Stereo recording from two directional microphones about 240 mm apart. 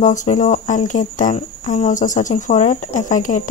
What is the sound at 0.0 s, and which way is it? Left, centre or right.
Speech, left.